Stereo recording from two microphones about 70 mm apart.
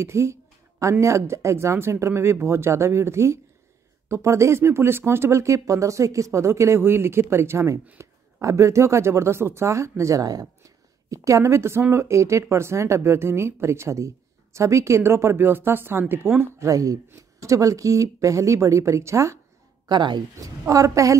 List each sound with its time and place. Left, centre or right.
0.0 s a sound: right
1.0 s a woman's voice: right
11.2 s a woman's voice: right
16.5 s speech: right
19.9 s speech: right
20.7 s speech: right